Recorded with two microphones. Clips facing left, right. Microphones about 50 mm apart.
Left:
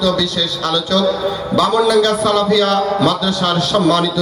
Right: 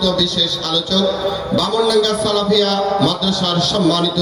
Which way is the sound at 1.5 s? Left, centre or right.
Centre.